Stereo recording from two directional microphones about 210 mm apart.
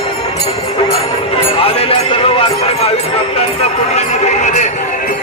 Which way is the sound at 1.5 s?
25° left (ahead or behind).